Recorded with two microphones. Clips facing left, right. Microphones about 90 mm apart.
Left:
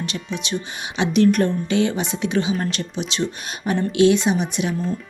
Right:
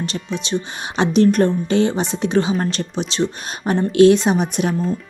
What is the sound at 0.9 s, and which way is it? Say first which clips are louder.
A woman's voice: right 2 dB; 35° right (ahead or behind).